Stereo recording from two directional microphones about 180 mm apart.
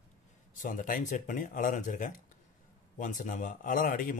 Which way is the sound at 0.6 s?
50° left (ahead or behind).